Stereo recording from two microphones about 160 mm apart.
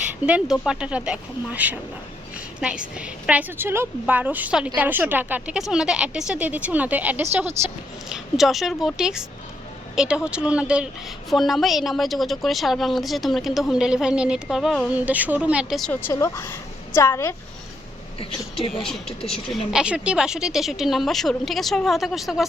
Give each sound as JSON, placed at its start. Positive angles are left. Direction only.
{"t": 0.3, "sound": "a woman's voice", "side_deg": -5}
{"t": 8.1, "sound": "a woman's voice", "side_deg": 0}
{"t": 15.9, "sound": "a woman's voice", "side_deg": 15}
{"t": 18.7, "sound": "a woman's voice", "side_deg": 0}